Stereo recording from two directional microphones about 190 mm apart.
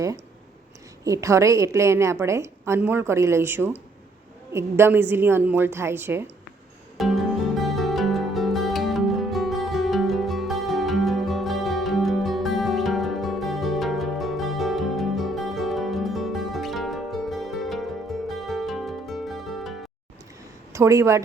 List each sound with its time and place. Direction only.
1.0 s a woman's voice: 15° right (ahead or behind)
6.9 s music: centre (ahead or behind)
20.7 s a woman's voice: 15° right (ahead or behind)